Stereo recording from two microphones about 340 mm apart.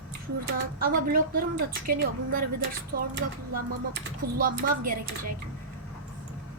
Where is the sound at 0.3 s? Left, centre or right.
Right.